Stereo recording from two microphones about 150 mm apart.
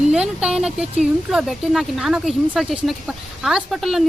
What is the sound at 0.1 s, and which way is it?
Speech, 5° right (ahead or behind).